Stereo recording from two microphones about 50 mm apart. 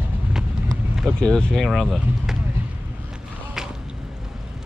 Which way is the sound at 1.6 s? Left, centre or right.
Centre.